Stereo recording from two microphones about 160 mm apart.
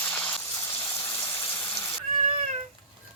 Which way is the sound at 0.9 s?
15° left (ahead or behind).